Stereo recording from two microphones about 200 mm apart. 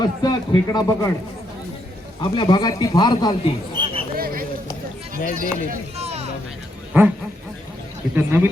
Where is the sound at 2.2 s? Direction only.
25° left (ahead or behind).